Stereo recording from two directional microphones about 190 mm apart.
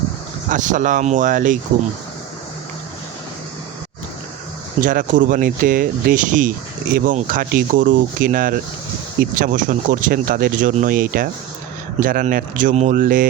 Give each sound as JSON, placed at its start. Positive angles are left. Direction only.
{"t": 0.5, "sound": "speech", "side_deg": -40}
{"t": 4.8, "sound": "speech", "side_deg": -45}